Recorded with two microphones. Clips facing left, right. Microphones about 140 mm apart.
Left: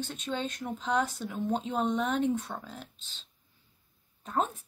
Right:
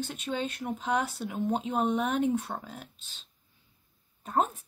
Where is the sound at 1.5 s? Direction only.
50° right (ahead or behind).